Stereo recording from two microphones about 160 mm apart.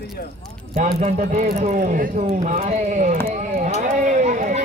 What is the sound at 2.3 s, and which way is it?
Speech, 45° right (ahead or behind).